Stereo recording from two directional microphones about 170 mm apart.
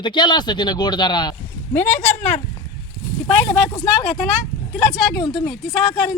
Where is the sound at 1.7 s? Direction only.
10° left (ahead or behind).